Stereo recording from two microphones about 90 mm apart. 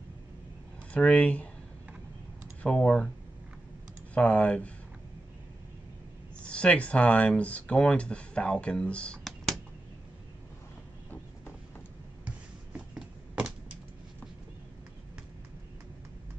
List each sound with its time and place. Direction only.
0.9 s speech: 15° left (ahead or behind)
2.6 s speech: 10° left (ahead or behind)
4.1 s speech: 15° left (ahead or behind)
6.5 s speech: 15° left (ahead or behind)
12.3 s a sound: 10° right (ahead or behind)